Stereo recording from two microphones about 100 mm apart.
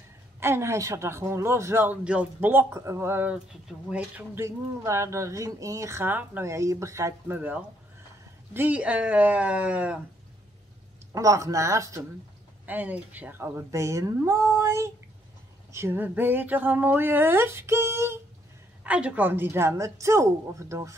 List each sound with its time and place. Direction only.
0.4 s speech: 25° right (ahead or behind)
2.0 s speech: 10° right (ahead or behind)
2.5 s speech: 30° right (ahead or behind)
3.3 s speech: 15° right (ahead or behind)
4.4 s speech: 30° right (ahead or behind)
6.5 s speech: 30° right (ahead or behind); by 9.9 s 15° right (ahead or behind)
11.1 s speech: 35° right (ahead or behind)
12.6 s speech: 15° right (ahead or behind)
18.9 s speech: 15° right (ahead or behind); by 20.9 s 30° right (ahead or behind)